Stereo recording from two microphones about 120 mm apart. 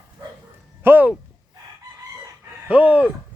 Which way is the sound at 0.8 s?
15° right (ahead or behind).